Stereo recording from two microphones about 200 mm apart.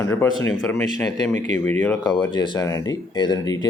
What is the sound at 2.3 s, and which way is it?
Speech, 20° left (ahead or behind).